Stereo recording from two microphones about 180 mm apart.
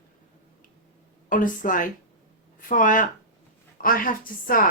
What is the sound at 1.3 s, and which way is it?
Speech, 45° left (ahead or behind).